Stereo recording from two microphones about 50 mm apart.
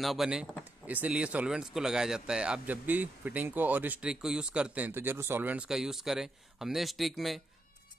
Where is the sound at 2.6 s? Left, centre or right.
Right.